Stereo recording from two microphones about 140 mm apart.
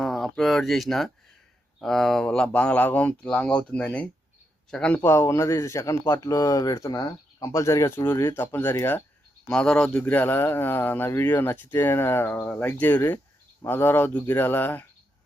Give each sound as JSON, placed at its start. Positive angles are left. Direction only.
{"t": 0.0, "sound": "speech", "side_deg": 5}
{"t": 5.0, "sound": "speech", "side_deg": 20}
{"t": 9.5, "sound": "speech", "side_deg": 5}